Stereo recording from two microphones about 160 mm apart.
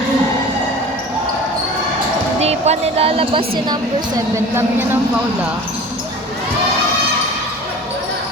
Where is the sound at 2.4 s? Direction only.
40° right (ahead or behind); by 5.0 s 15° right (ahead or behind).